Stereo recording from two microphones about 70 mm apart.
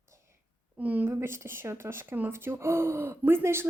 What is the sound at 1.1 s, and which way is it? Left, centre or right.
Speech, right.